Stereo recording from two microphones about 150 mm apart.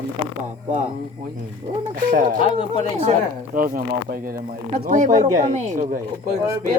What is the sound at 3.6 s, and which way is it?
Speech, 70° right (ahead or behind).